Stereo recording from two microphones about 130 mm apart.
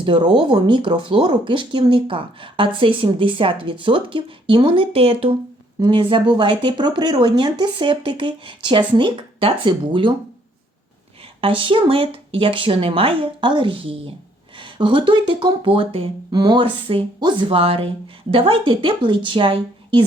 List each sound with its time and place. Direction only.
0.0 s speech: 40° right (ahead or behind)
11.3 s speech: 45° right (ahead or behind)
16.3 s speech: 30° right (ahead or behind)